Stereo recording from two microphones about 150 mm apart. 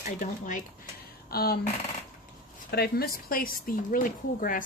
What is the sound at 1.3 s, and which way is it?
Speech, 90° left.